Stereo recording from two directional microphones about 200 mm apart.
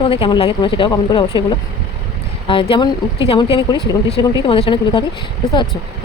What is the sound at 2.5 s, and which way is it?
A woman's voice, 25° left (ahead or behind).